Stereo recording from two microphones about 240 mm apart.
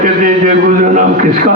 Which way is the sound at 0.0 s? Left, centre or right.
Right.